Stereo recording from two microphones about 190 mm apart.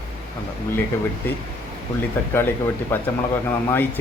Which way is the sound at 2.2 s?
10° left (ahead or behind).